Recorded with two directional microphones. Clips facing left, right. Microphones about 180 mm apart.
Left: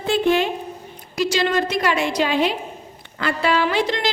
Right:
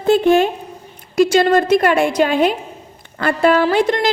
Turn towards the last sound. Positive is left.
turn(degrees=-50)  # may be behind; listen again after turning